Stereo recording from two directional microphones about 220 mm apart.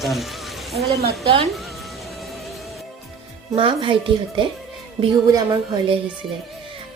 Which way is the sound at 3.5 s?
25° right (ahead or behind).